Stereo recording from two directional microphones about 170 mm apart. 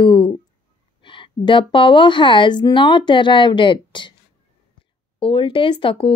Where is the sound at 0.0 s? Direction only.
30° left (ahead or behind).